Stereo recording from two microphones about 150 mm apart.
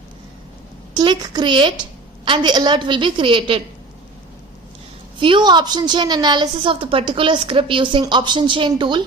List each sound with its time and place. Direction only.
0.9 s a woman's voice: 30° right (ahead or behind)
5.2 s a woman's voice: 30° right (ahead or behind)